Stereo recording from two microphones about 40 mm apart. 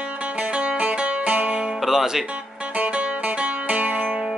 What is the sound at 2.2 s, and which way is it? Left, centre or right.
Music, right.